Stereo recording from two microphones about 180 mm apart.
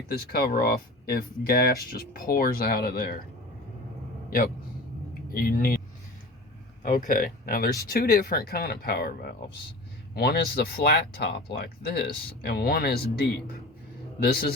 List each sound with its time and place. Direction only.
0.1 s speech: 55° left (ahead or behind)
4.3 s a man's voice: 55° left (ahead or behind)
6.8 s speech: 45° left (ahead or behind)